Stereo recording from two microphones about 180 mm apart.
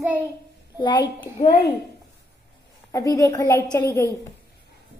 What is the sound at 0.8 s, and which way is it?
Speech, 25° left (ahead or behind).